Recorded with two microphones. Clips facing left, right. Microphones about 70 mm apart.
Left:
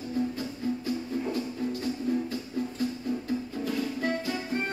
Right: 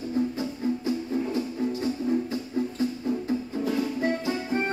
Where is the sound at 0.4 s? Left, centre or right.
Right.